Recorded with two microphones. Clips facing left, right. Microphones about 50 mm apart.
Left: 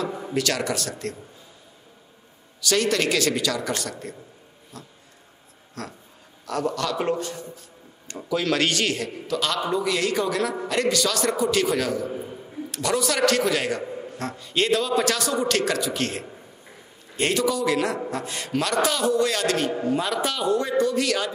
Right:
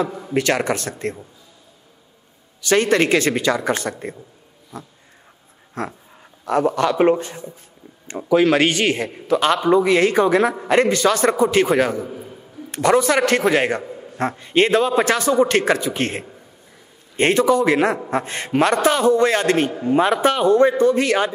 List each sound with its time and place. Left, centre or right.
0.3 s a man's voice: right
2.6 s a man's voice: right